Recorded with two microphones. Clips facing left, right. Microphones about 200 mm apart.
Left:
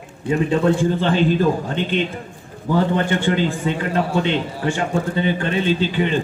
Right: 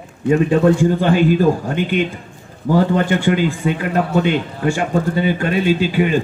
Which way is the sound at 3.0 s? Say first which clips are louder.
Right 3 dB; 10° right (ahead or behind).